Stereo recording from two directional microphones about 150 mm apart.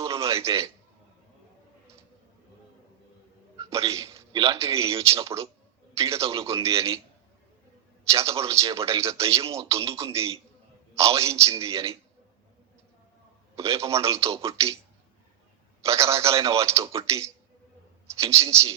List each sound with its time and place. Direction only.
0.0 s a sound: 20° right (ahead or behind)
3.9 s a sound: 20° right (ahead or behind)
4.4 s speech: 20° right (ahead or behind)
8.0 s speech: 20° right (ahead or behind)
13.6 s speech: 20° right (ahead or behind)
15.8 s speech: 20° right (ahead or behind)